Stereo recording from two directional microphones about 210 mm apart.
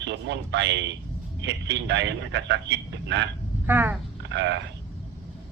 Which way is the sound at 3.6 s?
10° right (ahead or behind).